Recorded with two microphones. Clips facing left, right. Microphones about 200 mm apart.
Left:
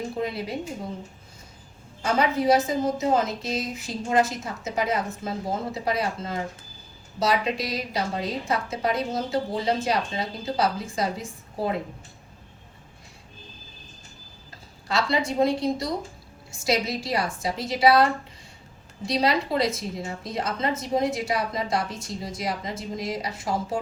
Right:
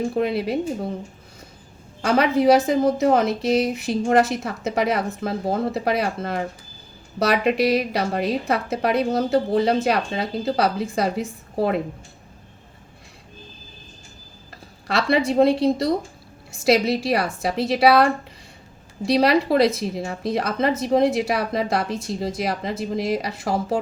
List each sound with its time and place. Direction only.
0.2 s a woman's voice: 65° right (ahead or behind)
2.0 s a woman's voice: 70° right (ahead or behind)
14.5 s a woman's voice: 65° right (ahead or behind)